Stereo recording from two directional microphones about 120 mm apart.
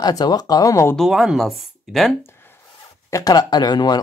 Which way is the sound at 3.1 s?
30° left (ahead or behind).